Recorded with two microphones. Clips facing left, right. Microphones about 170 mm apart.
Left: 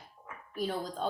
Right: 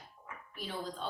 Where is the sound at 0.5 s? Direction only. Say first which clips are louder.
Left 7 dB; 45° left (ahead or behind).